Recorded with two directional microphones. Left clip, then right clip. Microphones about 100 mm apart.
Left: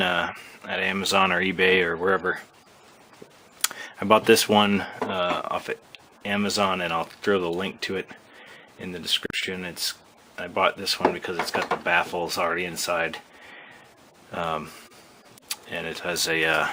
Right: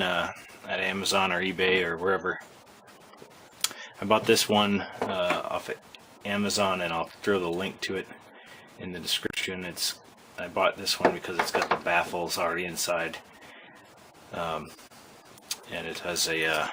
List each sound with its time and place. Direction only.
0.0 s speech: 25° left (ahead or behind)
3.6 s speech: 25° left (ahead or behind)
14.3 s speech: 30° left (ahead or behind)